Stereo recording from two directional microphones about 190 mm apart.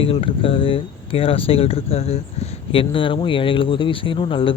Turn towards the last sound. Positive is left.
turn(degrees=25)  # may be behind; listen again after turning